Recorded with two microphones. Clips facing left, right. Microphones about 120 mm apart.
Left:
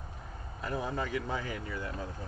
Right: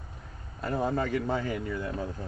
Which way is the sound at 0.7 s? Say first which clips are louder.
Right 6 dB; 40° right (ahead or behind).